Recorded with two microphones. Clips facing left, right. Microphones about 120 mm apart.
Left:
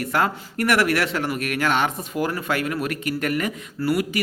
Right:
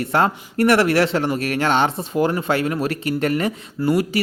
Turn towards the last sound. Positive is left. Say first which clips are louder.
# right 4 dB
turn(degrees=-30)  # may be behind; listen again after turning